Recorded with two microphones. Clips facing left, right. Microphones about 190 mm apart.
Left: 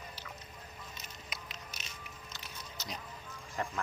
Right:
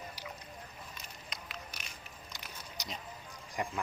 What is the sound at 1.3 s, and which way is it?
Crushing, 5° left (ahead or behind).